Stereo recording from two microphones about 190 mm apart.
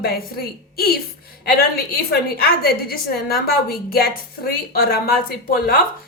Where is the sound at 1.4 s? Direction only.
50° left (ahead or behind).